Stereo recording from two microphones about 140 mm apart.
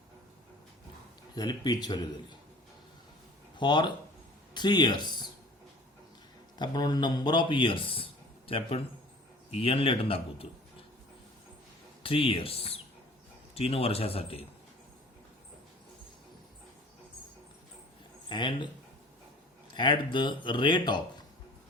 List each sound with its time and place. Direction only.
1.4 s speech: 30° left (ahead or behind)
3.6 s speech: 35° left (ahead or behind)
6.6 s a man's voice: 30° left (ahead or behind)
12.0 s speech: 40° left (ahead or behind)
18.3 s speech: 35° left (ahead or behind)
19.7 s speech: 35° left (ahead or behind)